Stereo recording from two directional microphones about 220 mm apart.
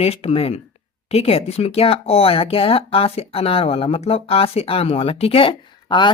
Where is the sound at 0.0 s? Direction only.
30° left (ahead or behind).